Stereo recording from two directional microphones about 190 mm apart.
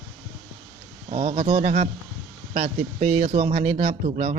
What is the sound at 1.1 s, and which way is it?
Speech, 35° right (ahead or behind).